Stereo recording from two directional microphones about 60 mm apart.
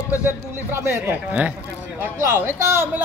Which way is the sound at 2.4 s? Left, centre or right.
Right.